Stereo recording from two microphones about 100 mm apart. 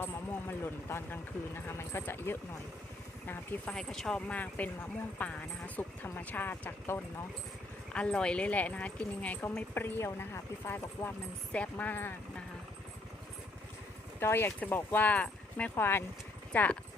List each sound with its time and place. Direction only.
0.0 s speech: 20° left (ahead or behind)
3.8 s speech: 5° left (ahead or behind)
14.2 s speech: 25° left (ahead or behind)